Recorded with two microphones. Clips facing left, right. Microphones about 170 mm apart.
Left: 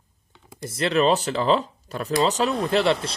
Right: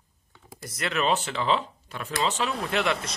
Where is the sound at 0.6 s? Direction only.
30° left (ahead or behind).